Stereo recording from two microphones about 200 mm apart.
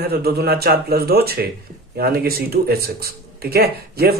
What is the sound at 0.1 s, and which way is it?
Speech, 50° right (ahead or behind).